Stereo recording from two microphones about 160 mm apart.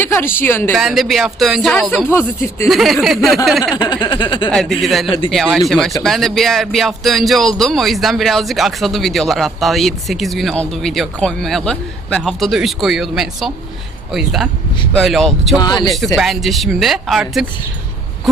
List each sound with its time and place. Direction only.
0.0 s a sound: 15° left (ahead or behind)
0.3 s speech: 15° left (ahead or behind)
0.8 s speech: centre (ahead or behind)
2.0 s speech: 15° left (ahead or behind)
2.6 s speech: centre (ahead or behind)
3.8 s speech: 25° left (ahead or behind)
4.5 s speech: centre (ahead or behind)
5.0 s a man's voice: 35° left (ahead or behind)
5.3 s speech: centre (ahead or behind)
15.5 s speech: 25° left (ahead or behind)
16.1 s speech: centre (ahead or behind)